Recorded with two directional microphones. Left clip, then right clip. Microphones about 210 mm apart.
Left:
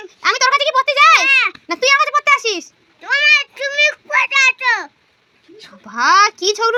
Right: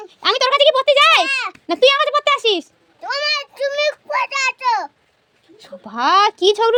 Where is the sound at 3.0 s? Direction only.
25° right (ahead or behind).